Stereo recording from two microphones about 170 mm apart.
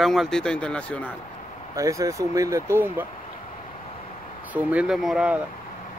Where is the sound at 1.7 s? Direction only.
20° right (ahead or behind).